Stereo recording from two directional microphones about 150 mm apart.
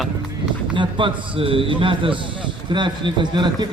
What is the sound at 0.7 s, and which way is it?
A man's voice, 35° right (ahead or behind).